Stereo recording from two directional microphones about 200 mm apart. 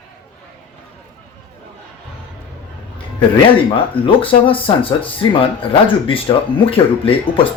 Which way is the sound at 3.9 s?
25° left (ahead or behind).